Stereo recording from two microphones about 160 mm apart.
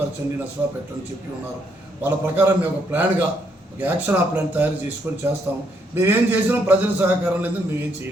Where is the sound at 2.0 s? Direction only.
15° right (ahead or behind).